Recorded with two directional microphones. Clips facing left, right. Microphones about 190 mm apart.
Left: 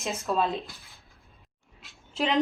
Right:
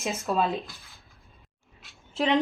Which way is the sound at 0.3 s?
Centre (ahead or behind).